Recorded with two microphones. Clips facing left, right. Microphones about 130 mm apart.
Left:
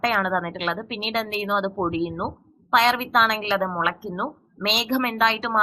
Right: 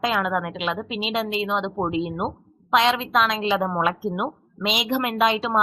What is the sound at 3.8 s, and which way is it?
Speech, 35° right (ahead or behind).